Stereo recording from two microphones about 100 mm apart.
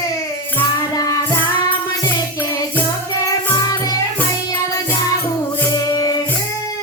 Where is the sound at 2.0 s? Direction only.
20° left (ahead or behind).